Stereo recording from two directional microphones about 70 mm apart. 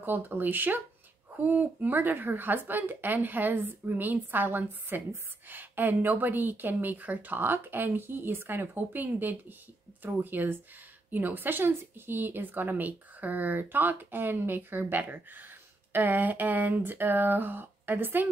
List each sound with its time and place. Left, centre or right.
0.0 s speech: right